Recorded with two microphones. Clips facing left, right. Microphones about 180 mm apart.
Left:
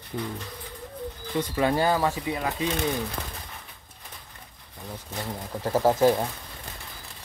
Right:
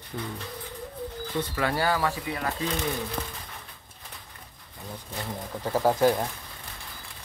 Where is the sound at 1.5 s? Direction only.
20° left (ahead or behind).